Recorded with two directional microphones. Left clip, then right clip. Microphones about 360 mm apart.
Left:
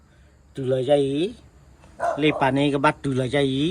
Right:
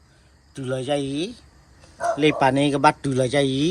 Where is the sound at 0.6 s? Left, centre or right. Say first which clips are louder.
Left 5 dB; centre.